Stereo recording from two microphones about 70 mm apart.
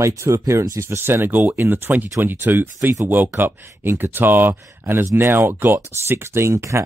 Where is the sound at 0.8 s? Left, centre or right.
Right.